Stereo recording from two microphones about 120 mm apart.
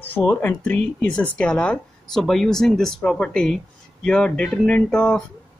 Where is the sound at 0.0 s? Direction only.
15° left (ahead or behind).